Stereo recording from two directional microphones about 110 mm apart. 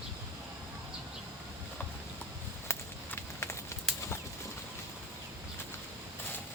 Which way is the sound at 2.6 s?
25° left (ahead or behind).